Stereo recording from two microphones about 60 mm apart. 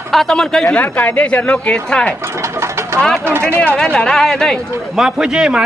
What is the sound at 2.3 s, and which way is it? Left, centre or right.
Bird, right.